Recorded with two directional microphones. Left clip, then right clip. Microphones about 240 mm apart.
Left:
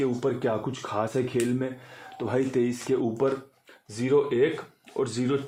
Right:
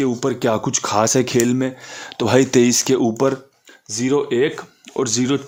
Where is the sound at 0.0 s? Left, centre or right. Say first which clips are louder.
Right 7 dB; right.